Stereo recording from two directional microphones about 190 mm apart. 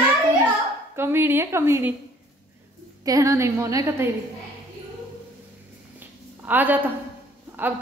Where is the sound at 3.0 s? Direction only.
15° right (ahead or behind).